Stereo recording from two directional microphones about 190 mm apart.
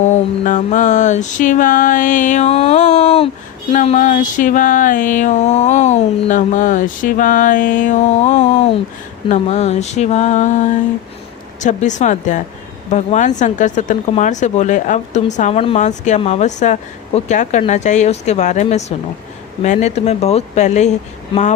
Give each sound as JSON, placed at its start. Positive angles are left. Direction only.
{"t": 0.0, "sound": "speech", "side_deg": 40}
{"t": 3.7, "sound": "a sound", "side_deg": 40}
{"t": 9.3, "sound": "speech", "side_deg": 35}